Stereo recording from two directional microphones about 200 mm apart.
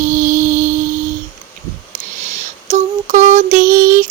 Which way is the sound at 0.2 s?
40° right (ahead or behind).